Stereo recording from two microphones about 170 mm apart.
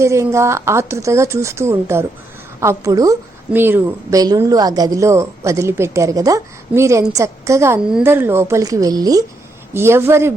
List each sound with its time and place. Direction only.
0.0 s a woman's voice: 15° right (ahead or behind)